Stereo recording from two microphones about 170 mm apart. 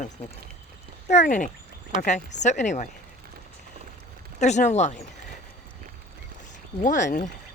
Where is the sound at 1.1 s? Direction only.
45° left (ahead or behind).